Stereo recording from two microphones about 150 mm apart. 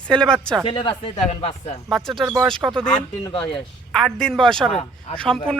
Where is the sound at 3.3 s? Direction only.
35° left (ahead or behind).